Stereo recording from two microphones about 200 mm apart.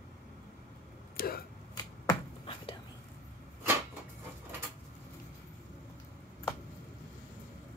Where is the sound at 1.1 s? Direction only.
50° left (ahead or behind).